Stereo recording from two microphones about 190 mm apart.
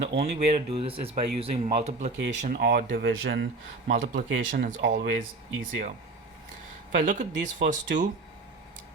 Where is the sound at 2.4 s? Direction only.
50° right (ahead or behind).